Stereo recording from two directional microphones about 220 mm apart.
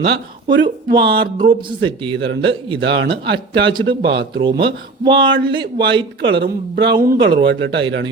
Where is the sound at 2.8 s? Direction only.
50° right (ahead or behind).